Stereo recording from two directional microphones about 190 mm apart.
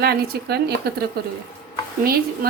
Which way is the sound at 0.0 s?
55° right (ahead or behind).